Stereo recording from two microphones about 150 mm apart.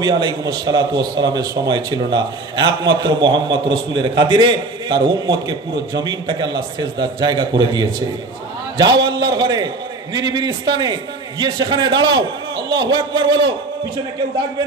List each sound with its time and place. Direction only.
0.0 s a man's voice: 30° right (ahead or behind)
9.3 s a sound: 30° right (ahead or behind)
10.1 s a man's voice: 25° right (ahead or behind)